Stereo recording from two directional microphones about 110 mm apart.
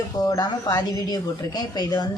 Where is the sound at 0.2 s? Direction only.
35° left (ahead or behind).